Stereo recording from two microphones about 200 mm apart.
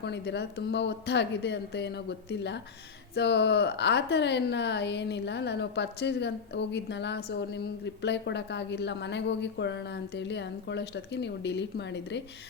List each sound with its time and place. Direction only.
0.0 s speech: 60° left (ahead or behind)